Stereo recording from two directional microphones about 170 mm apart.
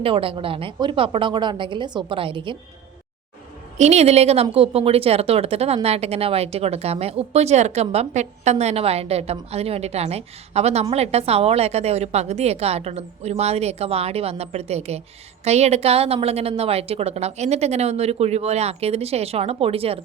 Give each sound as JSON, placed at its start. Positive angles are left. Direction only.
{"t": 0.0, "sound": "a woman's voice", "side_deg": -30}
{"t": 3.8, "sound": "speech", "side_deg": -40}